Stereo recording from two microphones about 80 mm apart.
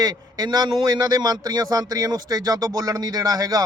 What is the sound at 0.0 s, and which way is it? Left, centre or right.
Speech, right.